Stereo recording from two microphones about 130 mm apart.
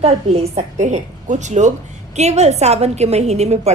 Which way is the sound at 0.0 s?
55° right (ahead or behind).